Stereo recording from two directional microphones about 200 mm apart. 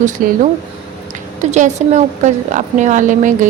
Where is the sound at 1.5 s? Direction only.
35° right (ahead or behind).